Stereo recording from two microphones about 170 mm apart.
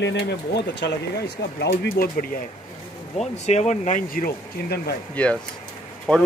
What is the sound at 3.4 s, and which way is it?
Speech, 40° left (ahead or behind).